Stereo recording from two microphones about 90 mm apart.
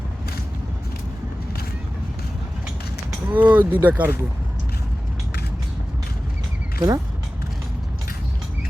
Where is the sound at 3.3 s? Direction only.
20° right (ahead or behind).